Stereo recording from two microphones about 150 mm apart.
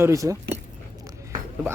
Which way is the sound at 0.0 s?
20° right (ahead or behind).